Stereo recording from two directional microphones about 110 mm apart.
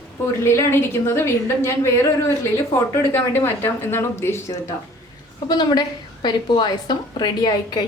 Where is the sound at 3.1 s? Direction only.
20° left (ahead or behind).